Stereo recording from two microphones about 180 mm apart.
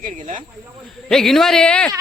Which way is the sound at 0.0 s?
45° right (ahead or behind).